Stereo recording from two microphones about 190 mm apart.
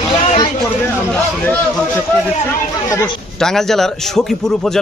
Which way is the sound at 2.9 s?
5° left (ahead or behind).